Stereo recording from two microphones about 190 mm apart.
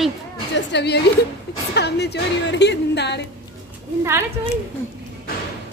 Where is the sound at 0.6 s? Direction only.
65° left (ahead or behind).